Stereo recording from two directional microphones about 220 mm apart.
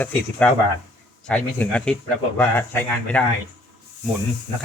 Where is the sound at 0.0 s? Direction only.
5° left (ahead or behind).